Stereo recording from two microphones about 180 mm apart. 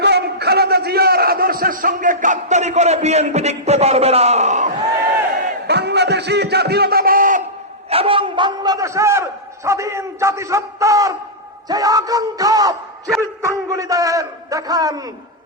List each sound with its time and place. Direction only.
0.0 s a man's voice: 65° right (ahead or behind); by 4.7 s 40° right (ahead or behind)
5.6 s a sound: 65° right (ahead or behind); by 7.4 s 50° right (ahead or behind)
7.9 s a man's voice: 30° right (ahead or behind)